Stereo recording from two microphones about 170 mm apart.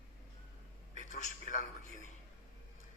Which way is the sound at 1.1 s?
50° left (ahead or behind).